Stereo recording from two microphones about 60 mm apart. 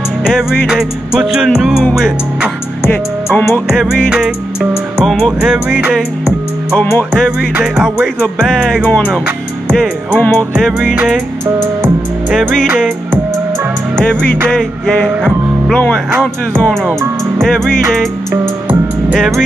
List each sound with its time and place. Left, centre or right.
0.3 s music: centre
7.6 s music: centre
8.8 s music: left
10.1 s music: left
12.6 s music: right
14.5 s music: centre
17.4 s music: centre
19.1 s music: centre